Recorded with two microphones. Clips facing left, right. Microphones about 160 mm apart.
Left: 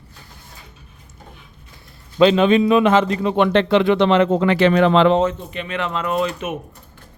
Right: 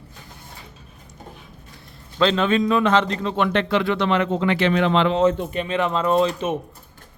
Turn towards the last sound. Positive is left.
turn(degrees=-30)  # may be behind; listen again after turning